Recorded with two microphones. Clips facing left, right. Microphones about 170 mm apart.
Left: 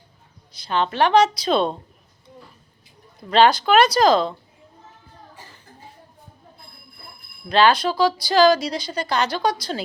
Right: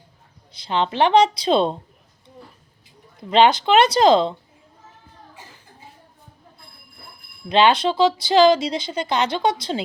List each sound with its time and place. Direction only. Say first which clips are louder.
0.6 s speech: right 1 dB; 25° right (ahead or behind)
3.2 s speech: even; 20° right (ahead or behind)
7.4 s speech: right 1 dB; 20° right (ahead or behind)